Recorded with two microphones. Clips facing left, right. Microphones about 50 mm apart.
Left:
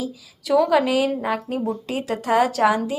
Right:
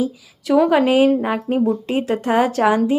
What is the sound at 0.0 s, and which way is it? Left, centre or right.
A woman's voice, right.